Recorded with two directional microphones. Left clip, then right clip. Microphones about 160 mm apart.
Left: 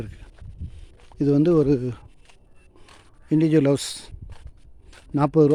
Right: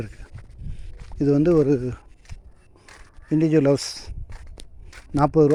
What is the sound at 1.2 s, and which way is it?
Speech, 20° left (ahead or behind).